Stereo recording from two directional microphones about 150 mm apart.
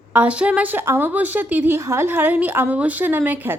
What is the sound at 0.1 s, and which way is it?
A woman's voice, 10° right (ahead or behind).